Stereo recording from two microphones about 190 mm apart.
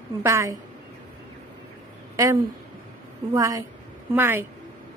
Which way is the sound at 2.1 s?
15° right (ahead or behind).